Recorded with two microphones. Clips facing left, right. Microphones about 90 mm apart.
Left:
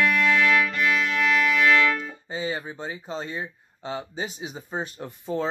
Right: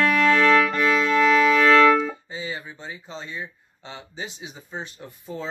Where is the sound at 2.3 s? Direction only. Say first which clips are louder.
Left 3 dB; 40° left (ahead or behind).